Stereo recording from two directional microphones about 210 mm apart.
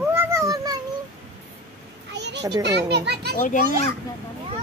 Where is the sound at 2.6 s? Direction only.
55° right (ahead or behind).